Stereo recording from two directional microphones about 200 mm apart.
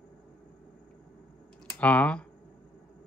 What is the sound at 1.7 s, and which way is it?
Speech, 5° left (ahead or behind).